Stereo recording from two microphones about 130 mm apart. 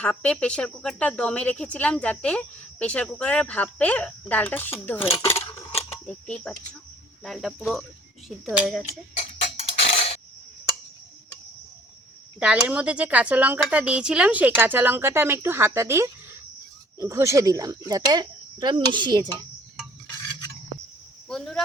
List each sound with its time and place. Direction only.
0.0 s speech: 10° left (ahead or behind)
6.1 s speech: 10° left (ahead or behind)
9.1 s a sound: 55° left (ahead or behind)
12.4 s a woman's voice: 10° right (ahead or behind); by 19.5 s 35° right (ahead or behind)
21.2 s speech: 5° left (ahead or behind)